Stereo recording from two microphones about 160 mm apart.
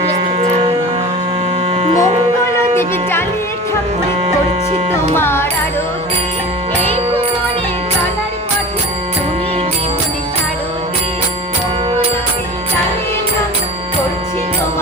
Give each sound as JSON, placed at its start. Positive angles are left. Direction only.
{"t": 0.3, "sound": "a sound", "side_deg": -40}
{"t": 1.7, "sound": "electric shaver", "side_deg": -40}
{"t": 2.7, "sound": "music", "side_deg": 15}
{"t": 5.1, "sound": "music", "side_deg": 15}